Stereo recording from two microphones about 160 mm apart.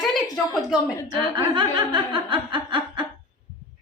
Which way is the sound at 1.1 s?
30° right (ahead or behind).